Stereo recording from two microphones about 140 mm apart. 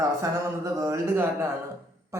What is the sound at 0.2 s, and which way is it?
Speech, 20° right (ahead or behind).